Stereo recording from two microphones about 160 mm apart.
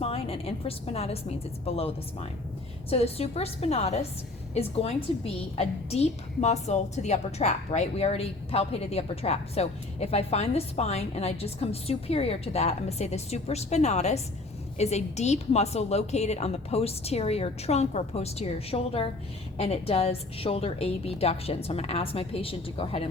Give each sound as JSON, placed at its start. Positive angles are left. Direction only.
{"t": 0.0, "sound": "a woman's voice", "side_deg": 40}